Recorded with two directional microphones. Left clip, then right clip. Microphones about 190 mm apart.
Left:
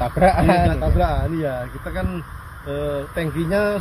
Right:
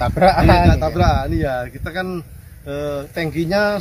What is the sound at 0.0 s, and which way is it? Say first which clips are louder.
Speech: right 3 dB; 5° right (ahead or behind).